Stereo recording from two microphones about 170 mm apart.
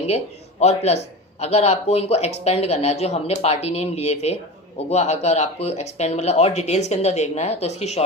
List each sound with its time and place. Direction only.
0.6 s speech: 40° left (ahead or behind)